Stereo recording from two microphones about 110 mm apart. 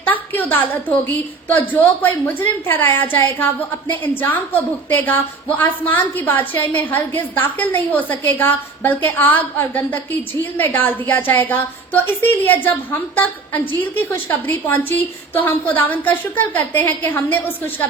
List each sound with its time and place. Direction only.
0.0 s a woman's voice: 15° left (ahead or behind)